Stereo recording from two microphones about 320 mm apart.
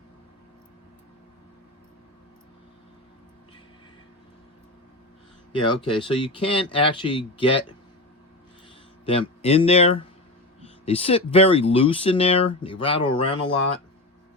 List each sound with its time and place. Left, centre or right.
5.5 s speech: centre
9.0 s speech: centre